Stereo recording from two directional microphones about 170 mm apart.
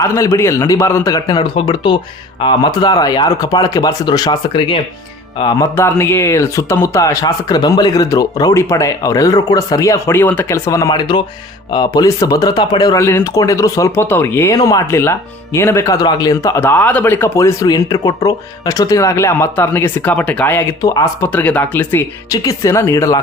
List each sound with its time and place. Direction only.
0.0 s speech: 15° left (ahead or behind)
5.7 s speech: 15° left (ahead or behind)